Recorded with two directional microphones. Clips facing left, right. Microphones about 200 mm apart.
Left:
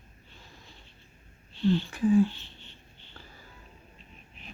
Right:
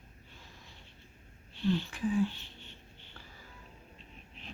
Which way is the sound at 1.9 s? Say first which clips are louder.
Left 8 dB; 40° left (ahead or behind).